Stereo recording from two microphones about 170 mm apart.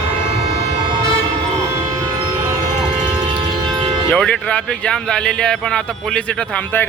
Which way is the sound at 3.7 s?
30° right (ahead or behind).